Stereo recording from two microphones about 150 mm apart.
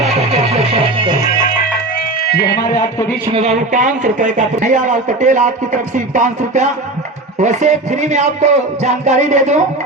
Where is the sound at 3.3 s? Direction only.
50° right (ahead or behind).